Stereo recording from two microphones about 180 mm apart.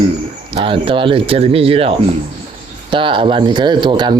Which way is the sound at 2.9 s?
30° right (ahead or behind).